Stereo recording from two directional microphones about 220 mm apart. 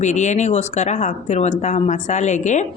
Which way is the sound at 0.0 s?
35° left (ahead or behind).